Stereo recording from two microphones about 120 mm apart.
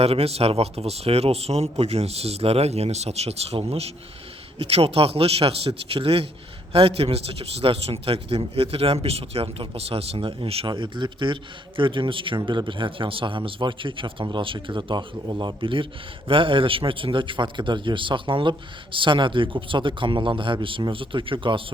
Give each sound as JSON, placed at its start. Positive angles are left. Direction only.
{"t": 0.0, "sound": "a man's voice", "side_deg": -55}